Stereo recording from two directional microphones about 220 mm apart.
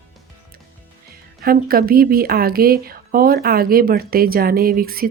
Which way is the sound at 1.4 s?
40° right (ahead or behind).